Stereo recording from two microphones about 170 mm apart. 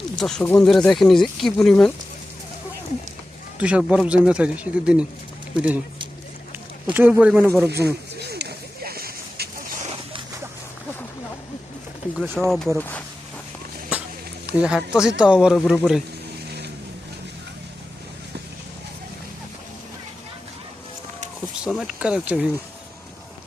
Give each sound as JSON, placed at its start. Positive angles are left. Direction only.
{"t": 0.2, "sound": "speech", "side_deg": 5}
{"t": 3.6, "sound": "speech", "side_deg": -5}
{"t": 6.8, "sound": "speech", "side_deg": -10}
{"t": 7.9, "sound": "a sound", "side_deg": -75}
{"t": 12.1, "sound": "speech", "side_deg": 0}
{"t": 14.4, "sound": "speech", "side_deg": -5}
{"t": 21.5, "sound": "speech", "side_deg": -5}